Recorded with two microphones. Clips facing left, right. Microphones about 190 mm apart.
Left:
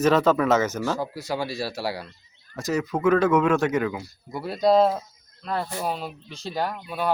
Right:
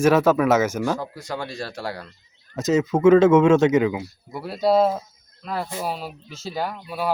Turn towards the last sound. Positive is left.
turn(degrees=-5)  # may be behind; listen again after turning